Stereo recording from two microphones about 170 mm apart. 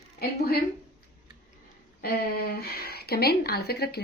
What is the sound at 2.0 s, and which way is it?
A woman's voice, 65° left (ahead or behind).